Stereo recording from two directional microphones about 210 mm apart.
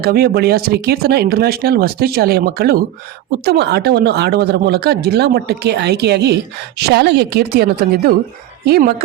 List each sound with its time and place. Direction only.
0.0 s speech: 50° right (ahead or behind)